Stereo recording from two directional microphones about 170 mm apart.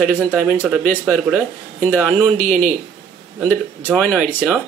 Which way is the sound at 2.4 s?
45° right (ahead or behind).